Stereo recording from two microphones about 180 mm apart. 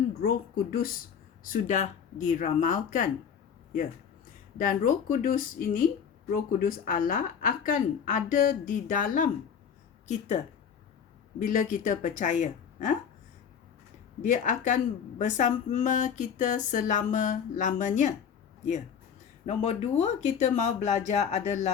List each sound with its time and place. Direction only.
0.2 s a woman's voice: 55° left (ahead or behind)
4.5 s a woman's voice: 45° left (ahead or behind)
11.4 s a woman's voice: 45° left (ahead or behind)
14.2 s a woman's voice: 45° left (ahead or behind)
19.5 s speech: 40° left (ahead or behind)